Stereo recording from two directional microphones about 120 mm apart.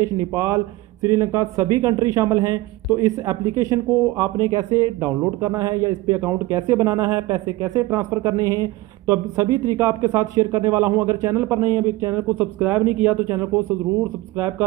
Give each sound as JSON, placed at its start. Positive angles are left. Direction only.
{"t": 0.0, "sound": "speech", "side_deg": -25}